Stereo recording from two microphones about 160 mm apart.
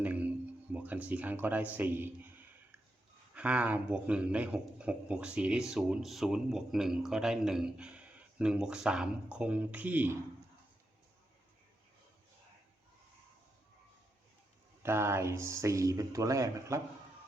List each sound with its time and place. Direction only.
0.0 s music: 10° right (ahead or behind)
0.7 s a man's voice: 10° right (ahead or behind)
14.8 s speech: 15° right (ahead or behind)